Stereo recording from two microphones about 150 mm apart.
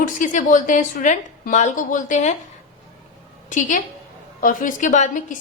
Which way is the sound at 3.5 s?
60° left (ahead or behind).